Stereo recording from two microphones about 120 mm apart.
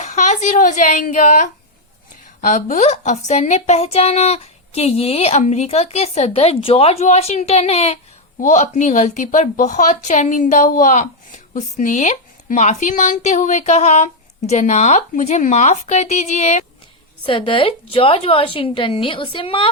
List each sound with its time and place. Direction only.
0.0 s a woman's voice: 80° left; by 7.9 s 60° left (ahead or behind)
8.4 s speech: 80° left
17.2 s a woman's voice: 45° left (ahead or behind)